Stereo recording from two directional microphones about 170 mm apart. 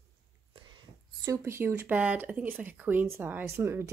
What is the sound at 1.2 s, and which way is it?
Speech, 15° right (ahead or behind).